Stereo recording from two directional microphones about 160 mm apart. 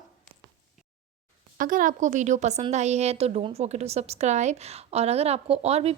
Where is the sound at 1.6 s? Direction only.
55° right (ahead or behind); by 5.9 s 40° right (ahead or behind).